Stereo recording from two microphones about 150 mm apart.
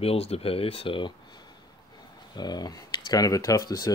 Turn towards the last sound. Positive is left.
turn(degrees=25)  # may be behind; listen again after turning